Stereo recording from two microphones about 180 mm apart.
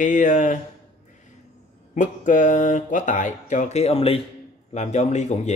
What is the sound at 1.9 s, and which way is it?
Speech, 45° left (ahead or behind).